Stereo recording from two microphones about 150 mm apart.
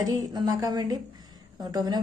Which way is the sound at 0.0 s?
25° right (ahead or behind).